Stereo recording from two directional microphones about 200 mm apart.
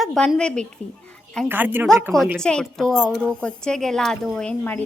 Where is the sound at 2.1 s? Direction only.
Centre (ahead or behind).